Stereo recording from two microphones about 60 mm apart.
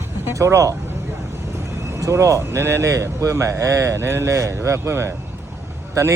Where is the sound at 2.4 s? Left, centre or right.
Right.